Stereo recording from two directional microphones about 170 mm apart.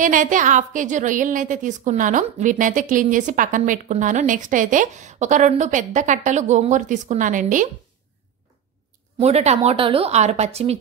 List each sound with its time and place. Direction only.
0.0 s a woman's voice: 50° right (ahead or behind)
9.2 s speech: 40° right (ahead or behind)